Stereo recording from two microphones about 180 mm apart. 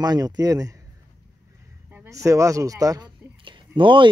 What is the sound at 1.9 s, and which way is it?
Speech, 15° right (ahead or behind).